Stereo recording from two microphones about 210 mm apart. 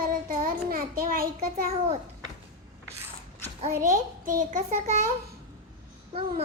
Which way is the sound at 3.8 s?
40° right (ahead or behind).